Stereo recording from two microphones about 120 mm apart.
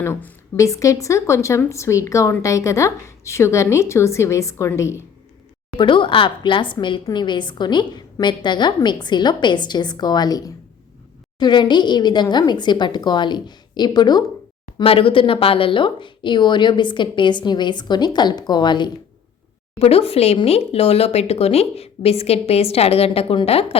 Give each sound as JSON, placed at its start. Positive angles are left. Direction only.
{"t": 0.0, "sound": "a woman's voice", "side_deg": 15}
{"t": 5.7, "sound": "a woman's voice", "side_deg": 45}
{"t": 14.8, "sound": "a woman's voice", "side_deg": 50}
{"t": 19.8, "sound": "speech", "side_deg": 55}